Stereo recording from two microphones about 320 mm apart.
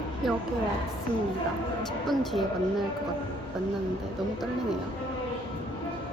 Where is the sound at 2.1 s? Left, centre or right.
Centre.